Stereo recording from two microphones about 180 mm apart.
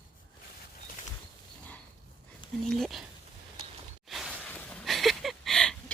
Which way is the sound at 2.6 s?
Centre (ahead or behind).